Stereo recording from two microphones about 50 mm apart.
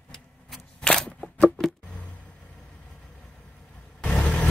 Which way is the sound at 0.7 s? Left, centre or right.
Centre.